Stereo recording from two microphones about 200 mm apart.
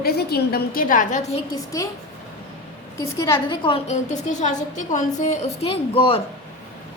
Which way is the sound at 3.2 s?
20° left (ahead or behind).